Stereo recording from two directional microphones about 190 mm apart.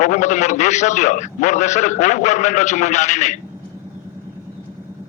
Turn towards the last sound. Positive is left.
turn(degrees=40)  # may be behind; listen again after turning